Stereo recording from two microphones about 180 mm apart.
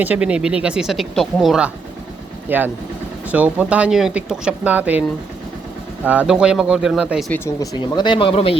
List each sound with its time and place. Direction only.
0.0 s speech: 10° right (ahead or behind)
6.1 s speech: 5° right (ahead or behind)
7.3 s speech: 15° left (ahead or behind); by 8.5 s 30° left (ahead or behind)